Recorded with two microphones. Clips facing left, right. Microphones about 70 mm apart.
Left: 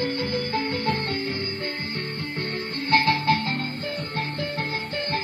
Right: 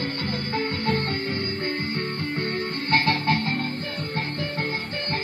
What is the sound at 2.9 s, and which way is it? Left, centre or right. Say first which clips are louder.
Music: left 2 dB; right.